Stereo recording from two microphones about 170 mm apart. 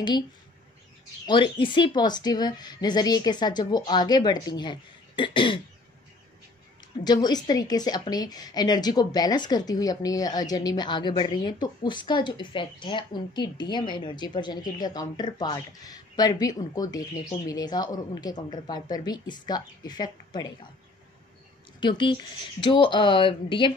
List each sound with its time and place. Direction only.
1.2 s a woman's voice: 30° left (ahead or behind)
7.1 s a woman's voice: 25° left (ahead or behind)
21.7 s a woman's voice: 25° left (ahead or behind)